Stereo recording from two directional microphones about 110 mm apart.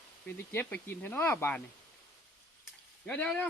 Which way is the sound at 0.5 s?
15° left (ahead or behind).